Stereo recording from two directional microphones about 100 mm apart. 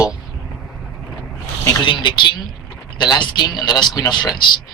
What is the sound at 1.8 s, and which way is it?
Speech, 50° left (ahead or behind).